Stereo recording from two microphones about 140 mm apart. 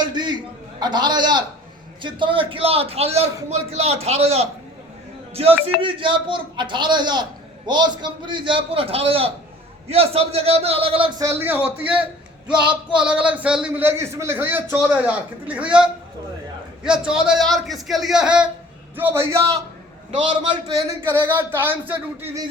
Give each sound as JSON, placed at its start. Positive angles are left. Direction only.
{"t": 0.0, "sound": "a man's voice", "side_deg": -30}
{"t": 11.2, "sound": "a man's voice", "side_deg": -15}
{"t": 20.1, "sound": "a man's voice", "side_deg": -50}
{"t": 21.1, "sound": "a man's voice", "side_deg": -15}